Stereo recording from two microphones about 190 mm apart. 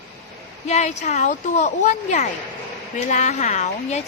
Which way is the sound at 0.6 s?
35° left (ahead or behind).